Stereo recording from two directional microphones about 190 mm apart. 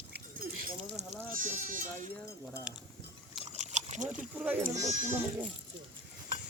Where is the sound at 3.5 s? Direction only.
35° right (ahead or behind).